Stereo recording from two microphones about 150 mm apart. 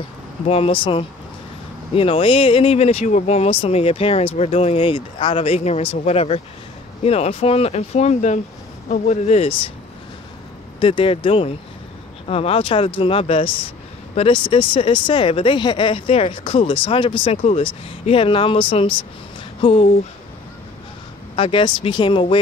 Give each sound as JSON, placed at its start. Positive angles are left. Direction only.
{"t": 0.5, "sound": "speech", "side_deg": 40}
{"t": 10.8, "sound": "speech", "side_deg": 35}
{"t": 21.4, "sound": "speech", "side_deg": 35}